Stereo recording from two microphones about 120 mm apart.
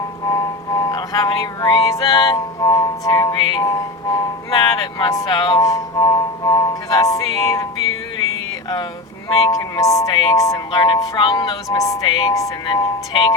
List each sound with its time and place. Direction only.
0.3 s music: 25° left (ahead or behind)
9.5 s music: 30° left (ahead or behind)